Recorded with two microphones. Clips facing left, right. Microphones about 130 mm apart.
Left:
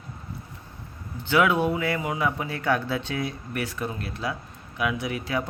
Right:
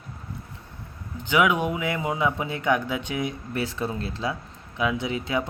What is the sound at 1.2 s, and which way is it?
Speech, 15° right (ahead or behind).